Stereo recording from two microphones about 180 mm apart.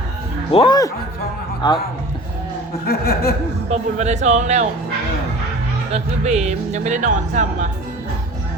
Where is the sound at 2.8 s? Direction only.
60° left (ahead or behind).